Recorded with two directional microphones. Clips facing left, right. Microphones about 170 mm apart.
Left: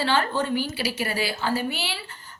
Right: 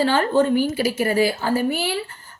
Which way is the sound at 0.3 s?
45° right (ahead or behind).